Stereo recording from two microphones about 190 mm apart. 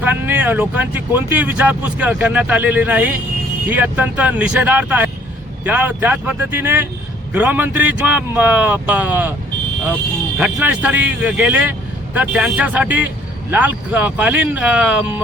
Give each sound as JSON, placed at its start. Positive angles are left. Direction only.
{"t": 0.0, "sound": "speech", "side_deg": -10}
{"t": 10.3, "sound": "speech", "side_deg": -5}